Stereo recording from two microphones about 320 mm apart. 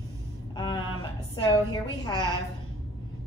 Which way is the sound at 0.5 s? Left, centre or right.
Centre.